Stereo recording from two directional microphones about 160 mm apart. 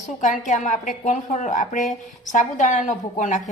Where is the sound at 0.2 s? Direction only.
50° left (ahead or behind).